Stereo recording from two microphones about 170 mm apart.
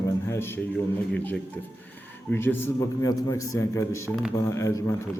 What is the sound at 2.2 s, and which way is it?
A man's voice, 15° left (ahead or behind).